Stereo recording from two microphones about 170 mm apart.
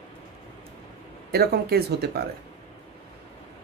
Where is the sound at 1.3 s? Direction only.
65° right (ahead or behind).